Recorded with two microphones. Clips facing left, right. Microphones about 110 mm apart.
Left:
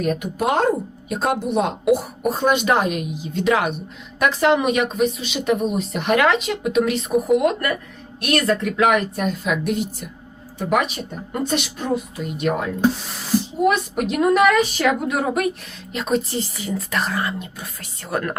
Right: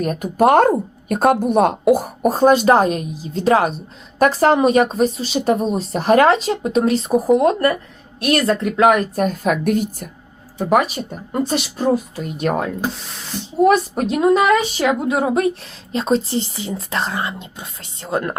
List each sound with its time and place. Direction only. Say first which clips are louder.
0.0 s speech: right 6 dB; 45° right (ahead or behind)
11.8 s speech: right 5 dB; 35° right (ahead or behind)
12.8 s speech: left 5 dB; centre (ahead or behind)
13.6 s a woman's voice: right 8 dB; 35° right (ahead or behind)